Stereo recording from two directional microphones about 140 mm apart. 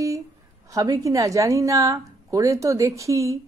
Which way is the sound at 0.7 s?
25° right (ahead or behind).